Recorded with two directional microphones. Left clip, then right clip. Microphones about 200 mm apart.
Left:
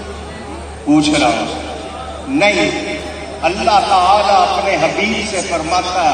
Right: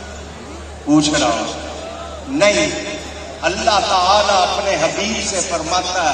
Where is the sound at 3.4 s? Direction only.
35° right (ahead or behind).